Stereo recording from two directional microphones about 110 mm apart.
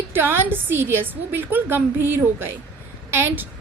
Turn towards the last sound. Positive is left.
turn(degrees=-20)  # may be behind; listen again after turning